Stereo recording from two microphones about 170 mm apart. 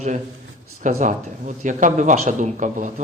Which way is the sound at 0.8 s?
45° right (ahead or behind).